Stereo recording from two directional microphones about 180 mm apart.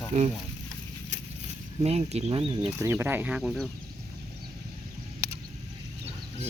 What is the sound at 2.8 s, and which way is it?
Speech, 15° right (ahead or behind).